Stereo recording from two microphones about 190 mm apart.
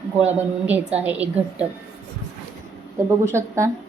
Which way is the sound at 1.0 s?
10° right (ahead or behind).